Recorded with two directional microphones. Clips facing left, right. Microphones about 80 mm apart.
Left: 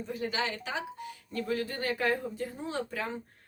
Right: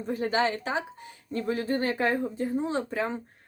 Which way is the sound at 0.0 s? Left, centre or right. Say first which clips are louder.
Right 7 dB; right.